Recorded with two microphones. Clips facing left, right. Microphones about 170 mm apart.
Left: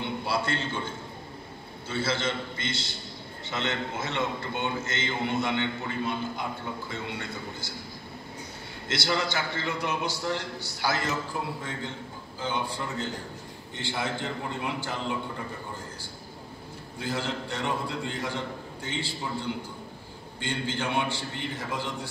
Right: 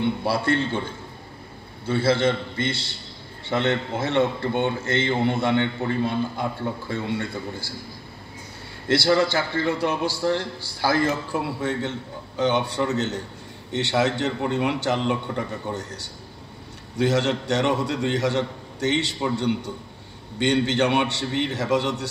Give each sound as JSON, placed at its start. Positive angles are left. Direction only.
{"t": 0.2, "sound": "a man's voice", "side_deg": -60}
{"t": 1.9, "sound": "a man's voice", "side_deg": -60}
{"t": 8.8, "sound": "a man's voice", "side_deg": -60}
{"t": 10.9, "sound": "a man's voice", "side_deg": -55}
{"t": 16.9, "sound": "a man's voice", "side_deg": -75}